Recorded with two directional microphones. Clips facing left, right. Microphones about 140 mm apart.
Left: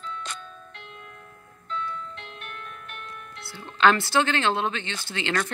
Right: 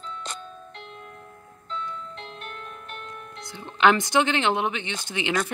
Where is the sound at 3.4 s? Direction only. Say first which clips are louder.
Right 1 dB; 20° right (ahead or behind).